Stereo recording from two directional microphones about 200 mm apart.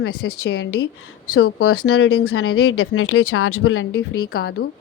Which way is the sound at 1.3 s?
90° left.